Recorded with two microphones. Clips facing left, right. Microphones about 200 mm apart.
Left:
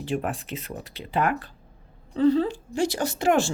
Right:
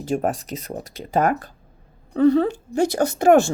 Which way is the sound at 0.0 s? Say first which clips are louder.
Right 5 dB; 40° right (ahead or behind).